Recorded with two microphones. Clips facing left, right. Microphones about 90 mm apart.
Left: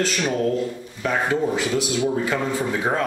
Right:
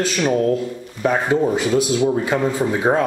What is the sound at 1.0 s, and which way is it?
Speech, 25° right (ahead or behind).